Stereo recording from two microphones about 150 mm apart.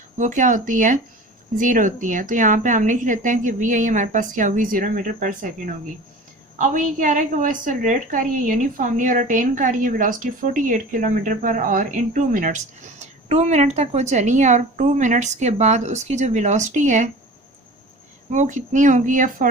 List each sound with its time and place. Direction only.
0.2 s a woman's voice: 55° right (ahead or behind)
18.3 s a woman's voice: 55° right (ahead or behind)